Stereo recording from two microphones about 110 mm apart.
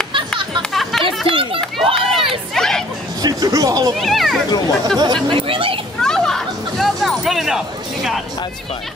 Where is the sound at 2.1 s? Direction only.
55° right (ahead or behind).